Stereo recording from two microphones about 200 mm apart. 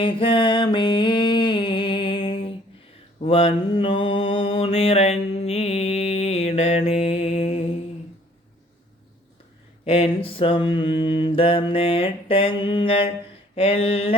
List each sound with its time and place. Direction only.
0.0 s mantra: 25° left (ahead or behind)
9.8 s mantra: 30° left (ahead or behind)